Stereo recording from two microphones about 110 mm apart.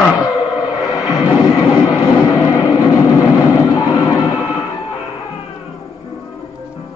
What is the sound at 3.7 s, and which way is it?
Music, 35° left (ahead or behind).